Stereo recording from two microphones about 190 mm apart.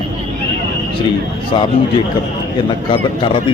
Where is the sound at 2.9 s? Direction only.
25° left (ahead or behind).